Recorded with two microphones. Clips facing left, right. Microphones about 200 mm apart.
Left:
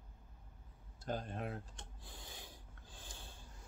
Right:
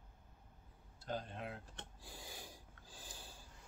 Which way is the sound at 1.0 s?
50° left (ahead or behind).